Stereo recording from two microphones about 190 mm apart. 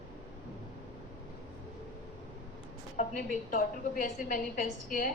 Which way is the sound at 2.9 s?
45° left (ahead or behind).